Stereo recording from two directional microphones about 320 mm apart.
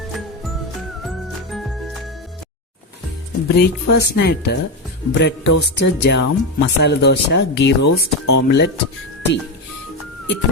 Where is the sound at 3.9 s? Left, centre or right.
Left.